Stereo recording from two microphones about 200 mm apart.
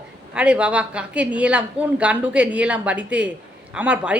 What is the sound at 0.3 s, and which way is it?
A woman's voice, 5° right (ahead or behind).